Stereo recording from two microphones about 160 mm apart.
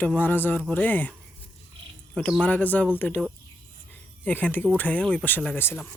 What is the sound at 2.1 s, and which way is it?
Speech, 5° left (ahead or behind).